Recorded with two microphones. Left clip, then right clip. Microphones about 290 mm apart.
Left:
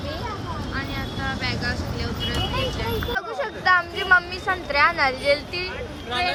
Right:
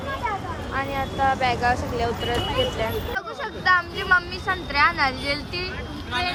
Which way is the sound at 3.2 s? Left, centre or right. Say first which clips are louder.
Left 2 dB; centre.